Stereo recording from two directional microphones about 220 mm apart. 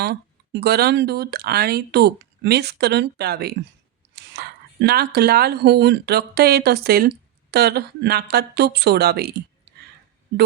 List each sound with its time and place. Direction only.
0.0 s speech: 50° right (ahead or behind)